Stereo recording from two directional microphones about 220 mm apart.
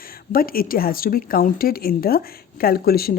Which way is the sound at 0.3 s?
40° left (ahead or behind).